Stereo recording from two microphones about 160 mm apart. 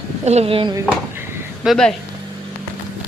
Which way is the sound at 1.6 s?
Centre (ahead or behind).